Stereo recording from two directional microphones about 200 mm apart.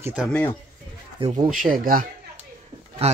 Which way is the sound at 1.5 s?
45° right (ahead or behind).